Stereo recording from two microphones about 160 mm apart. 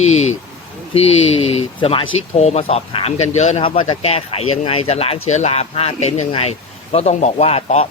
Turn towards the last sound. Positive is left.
turn(degrees=40)  # may be behind; listen again after turning